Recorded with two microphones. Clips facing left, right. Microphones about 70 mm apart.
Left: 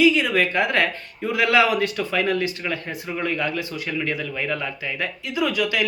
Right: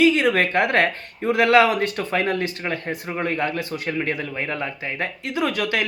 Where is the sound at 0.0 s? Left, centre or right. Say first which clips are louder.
Right 1 dB; right.